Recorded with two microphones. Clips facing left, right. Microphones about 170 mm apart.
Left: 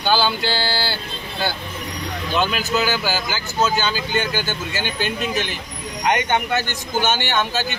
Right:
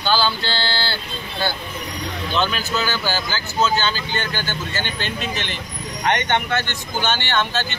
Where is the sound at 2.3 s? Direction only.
10° left (ahead or behind).